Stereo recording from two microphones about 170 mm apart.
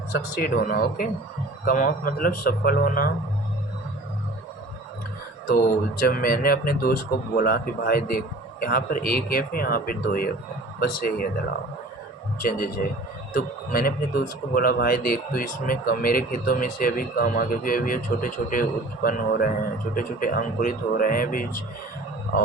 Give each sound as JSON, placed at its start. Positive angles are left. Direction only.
{"t": 0.1, "sound": "speech", "side_deg": 65}
{"t": 5.5, "sound": "speech", "side_deg": 55}
{"t": 12.4, "sound": "a man's voice", "side_deg": 55}